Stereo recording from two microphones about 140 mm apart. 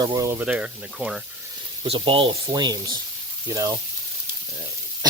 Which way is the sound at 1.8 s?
40° right (ahead or behind).